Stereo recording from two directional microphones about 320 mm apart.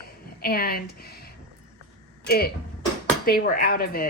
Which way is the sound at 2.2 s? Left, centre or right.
Left.